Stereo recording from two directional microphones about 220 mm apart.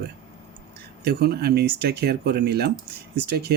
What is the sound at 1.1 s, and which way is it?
Speech, 45° right (ahead or behind).